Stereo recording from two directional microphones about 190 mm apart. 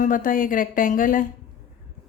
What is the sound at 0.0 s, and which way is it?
A woman's voice, 45° left (ahead or behind).